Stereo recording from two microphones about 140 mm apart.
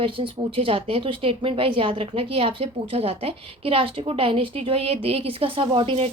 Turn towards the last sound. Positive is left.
turn(degrees=-40)  # may be behind; listen again after turning